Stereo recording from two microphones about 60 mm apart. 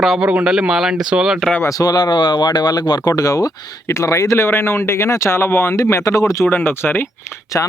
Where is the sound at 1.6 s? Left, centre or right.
Left.